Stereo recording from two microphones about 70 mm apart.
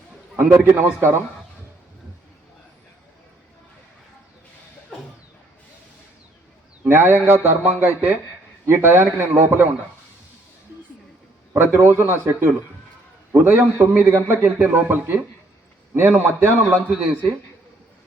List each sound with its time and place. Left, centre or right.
0.6 s a man's voice: right
6.8 s a man's voice: right
11.5 s a man's voice: right